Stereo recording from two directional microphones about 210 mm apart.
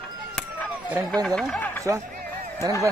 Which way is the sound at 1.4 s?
5° left (ahead or behind).